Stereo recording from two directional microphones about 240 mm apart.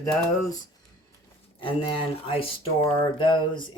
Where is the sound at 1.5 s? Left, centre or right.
Left.